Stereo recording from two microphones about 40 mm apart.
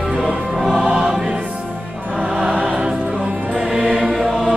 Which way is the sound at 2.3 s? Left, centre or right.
Right.